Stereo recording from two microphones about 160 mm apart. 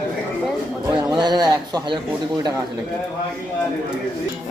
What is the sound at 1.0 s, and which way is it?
A man's voice, 25° right (ahead or behind).